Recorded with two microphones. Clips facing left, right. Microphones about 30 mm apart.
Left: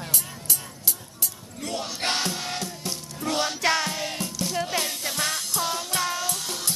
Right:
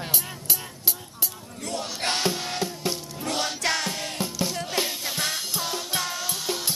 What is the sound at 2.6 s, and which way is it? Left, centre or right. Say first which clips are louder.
Music: right 4 dB; centre.